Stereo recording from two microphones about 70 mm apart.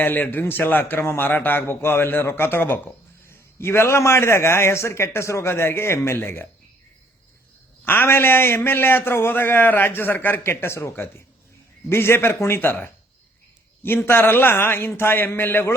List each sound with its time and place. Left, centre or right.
0.0 s a man's voice: left
7.9 s a man's voice: left